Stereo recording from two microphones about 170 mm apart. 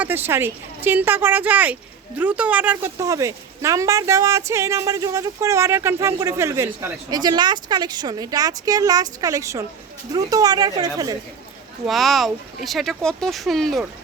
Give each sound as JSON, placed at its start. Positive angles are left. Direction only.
{"t": 0.0, "sound": "speech", "side_deg": -10}
{"t": 11.9, "sound": "speech", "side_deg": 0}